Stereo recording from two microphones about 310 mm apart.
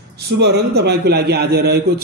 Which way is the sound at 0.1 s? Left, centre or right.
Right.